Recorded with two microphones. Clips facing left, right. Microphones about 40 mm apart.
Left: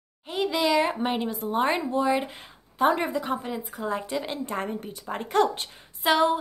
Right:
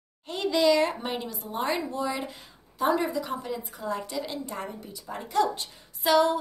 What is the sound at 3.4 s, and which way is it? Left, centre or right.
A woman's voice, left.